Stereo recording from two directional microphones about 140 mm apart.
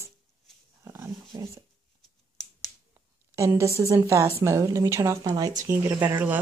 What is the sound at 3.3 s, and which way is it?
Speech, 20° right (ahead or behind).